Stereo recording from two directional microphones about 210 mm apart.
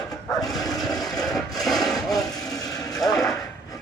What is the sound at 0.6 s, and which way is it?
Vehicle, 15° left (ahead or behind).